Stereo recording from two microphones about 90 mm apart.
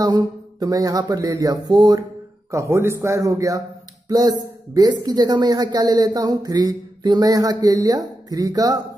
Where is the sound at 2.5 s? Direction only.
30° right (ahead or behind).